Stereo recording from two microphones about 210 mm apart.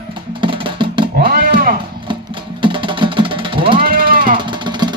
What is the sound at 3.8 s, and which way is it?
Sheep, 45° right (ahead or behind).